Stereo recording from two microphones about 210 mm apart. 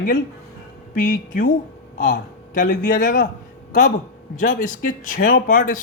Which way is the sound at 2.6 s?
35° left (ahead or behind).